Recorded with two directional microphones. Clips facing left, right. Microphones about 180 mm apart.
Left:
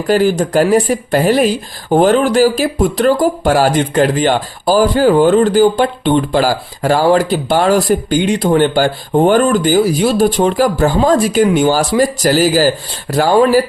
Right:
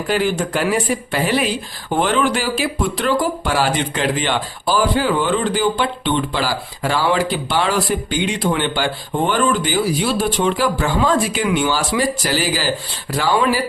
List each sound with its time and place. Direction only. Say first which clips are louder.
0.1 s speech: left 7 dB; 40° left (ahead or behind)